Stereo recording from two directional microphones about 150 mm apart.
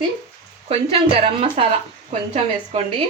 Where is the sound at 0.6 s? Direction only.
40° right (ahead or behind).